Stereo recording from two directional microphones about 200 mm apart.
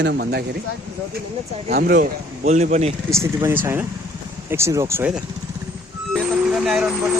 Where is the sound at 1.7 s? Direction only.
45° right (ahead or behind).